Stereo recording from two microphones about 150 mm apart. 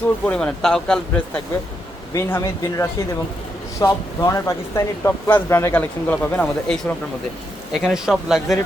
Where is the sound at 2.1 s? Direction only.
20° left (ahead or behind).